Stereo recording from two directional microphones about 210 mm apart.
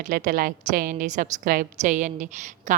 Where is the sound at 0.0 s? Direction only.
40° right (ahead or behind).